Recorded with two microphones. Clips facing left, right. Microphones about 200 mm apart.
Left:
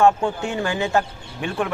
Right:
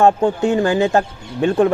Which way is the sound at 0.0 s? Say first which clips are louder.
Right 4 dB; 40° right (ahead or behind).